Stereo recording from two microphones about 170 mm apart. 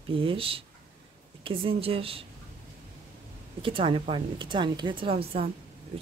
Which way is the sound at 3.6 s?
30° right (ahead or behind).